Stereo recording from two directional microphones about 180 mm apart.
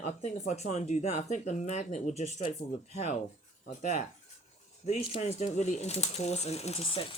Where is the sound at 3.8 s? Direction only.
40° left (ahead or behind).